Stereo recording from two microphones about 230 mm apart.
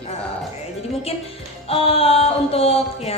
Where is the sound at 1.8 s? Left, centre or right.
Left.